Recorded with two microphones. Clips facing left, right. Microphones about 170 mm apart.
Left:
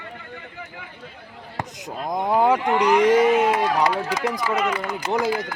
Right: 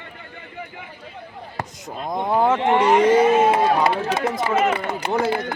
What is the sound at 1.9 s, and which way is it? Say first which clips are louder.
Speech: left 1 dB; centre (ahead or behind).